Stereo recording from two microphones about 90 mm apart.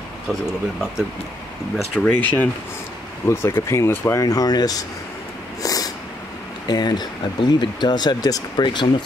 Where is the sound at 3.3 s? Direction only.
30° left (ahead or behind).